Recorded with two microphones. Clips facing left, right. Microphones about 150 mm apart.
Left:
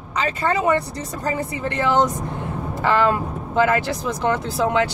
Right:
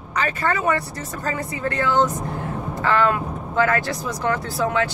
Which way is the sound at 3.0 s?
25° left (ahead or behind).